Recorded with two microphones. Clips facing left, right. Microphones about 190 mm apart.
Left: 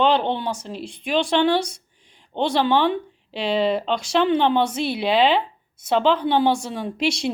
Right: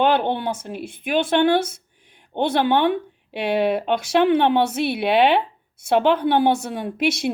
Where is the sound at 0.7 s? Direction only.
55° right (ahead or behind).